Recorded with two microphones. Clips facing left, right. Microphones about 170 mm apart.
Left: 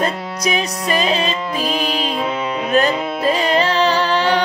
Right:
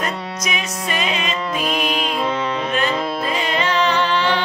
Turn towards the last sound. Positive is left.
turn(degrees=40)  # may be behind; listen again after turning